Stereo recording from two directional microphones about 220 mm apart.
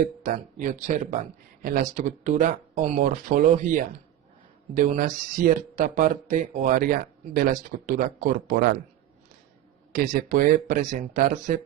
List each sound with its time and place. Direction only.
0.2 s speech: 40° right (ahead or behind)
9.9 s speech: 40° right (ahead or behind)